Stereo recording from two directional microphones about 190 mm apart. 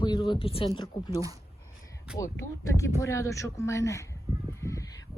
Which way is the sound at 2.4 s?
45° left (ahead or behind).